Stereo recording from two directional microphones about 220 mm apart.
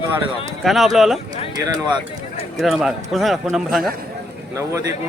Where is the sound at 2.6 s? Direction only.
Centre (ahead or behind).